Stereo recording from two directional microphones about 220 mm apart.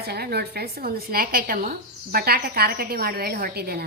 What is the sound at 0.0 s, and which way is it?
A woman's voice, 45° right (ahead or behind).